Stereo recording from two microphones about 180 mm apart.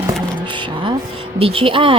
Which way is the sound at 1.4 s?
30° right (ahead or behind).